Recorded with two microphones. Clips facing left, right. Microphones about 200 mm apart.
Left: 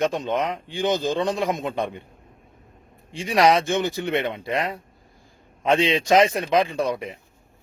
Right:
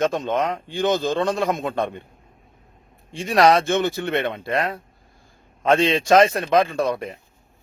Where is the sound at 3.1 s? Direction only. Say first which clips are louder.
Right 2 dB; 15° left (ahead or behind).